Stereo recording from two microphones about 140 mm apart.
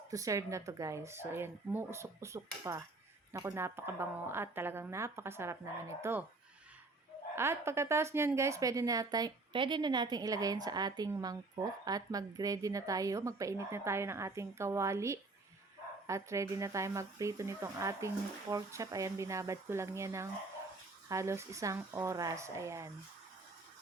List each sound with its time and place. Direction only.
0.1 s a woman's voice: 25° right (ahead or behind)
7.3 s a woman's voice: 20° right (ahead or behind)